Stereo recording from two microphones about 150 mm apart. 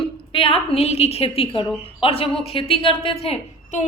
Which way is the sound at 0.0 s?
35° left (ahead or behind).